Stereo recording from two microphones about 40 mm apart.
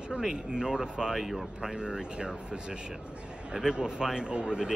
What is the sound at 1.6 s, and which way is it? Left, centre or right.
A man's voice, centre.